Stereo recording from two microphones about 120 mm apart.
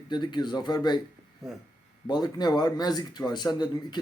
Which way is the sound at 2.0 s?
35° left (ahead or behind).